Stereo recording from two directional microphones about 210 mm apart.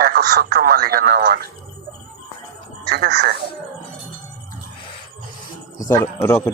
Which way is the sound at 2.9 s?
50° right (ahead or behind).